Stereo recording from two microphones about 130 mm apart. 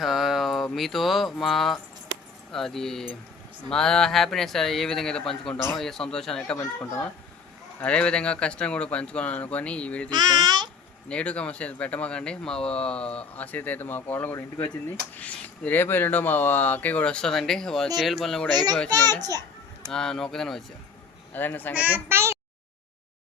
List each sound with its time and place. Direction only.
0.0 s a sound: centre (ahead or behind)
2.5 s a man's voice: 5° left (ahead or behind)
6.7 s speech: 20° left (ahead or behind)
7.8 s speech: 10° left (ahead or behind)
10.1 s a child's voice: 35° right (ahead or behind)
11.1 s speech: 10° left (ahead or behind)
18.5 s a child's voice: 30° right (ahead or behind)
19.9 s a man's voice: 5° left (ahead or behind)
21.3 s speech: 15° left (ahead or behind)
21.9 s a child's voice: 20° right (ahead or behind)